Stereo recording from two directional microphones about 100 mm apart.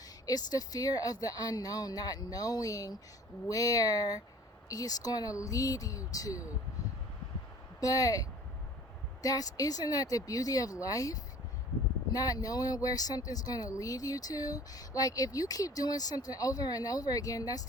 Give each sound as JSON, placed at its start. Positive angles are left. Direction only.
{"t": 0.3, "sound": "speech", "side_deg": 40}
{"t": 7.8, "sound": "speech", "side_deg": 35}